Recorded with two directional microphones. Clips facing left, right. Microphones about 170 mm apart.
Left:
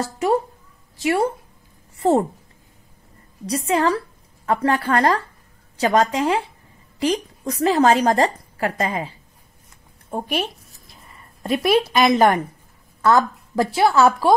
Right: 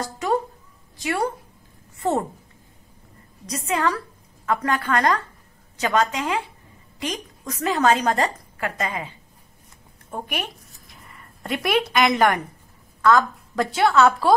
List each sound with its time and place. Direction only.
1.0 s a woman's voice: 25° left (ahead or behind)
2.0 s a sound: 30° left (ahead or behind)
3.4 s a woman's voice: 30° left (ahead or behind)
10.1 s a woman's voice: 30° left (ahead or behind)